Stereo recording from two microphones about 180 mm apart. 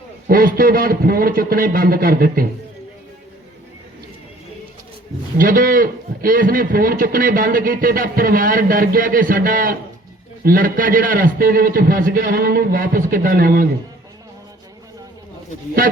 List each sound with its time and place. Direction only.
0.3 s a man's voice: 55° right (ahead or behind)
5.4 s a man's voice: 50° right (ahead or behind)